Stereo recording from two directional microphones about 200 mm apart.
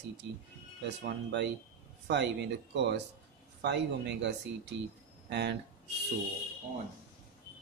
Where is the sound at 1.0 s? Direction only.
60° right (ahead or behind).